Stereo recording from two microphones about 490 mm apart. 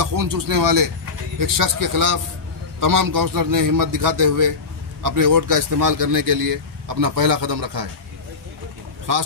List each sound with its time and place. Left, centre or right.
0.0 s a man's voice: right